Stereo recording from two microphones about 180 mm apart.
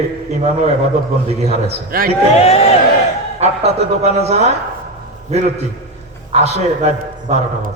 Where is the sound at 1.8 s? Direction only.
55° right (ahead or behind).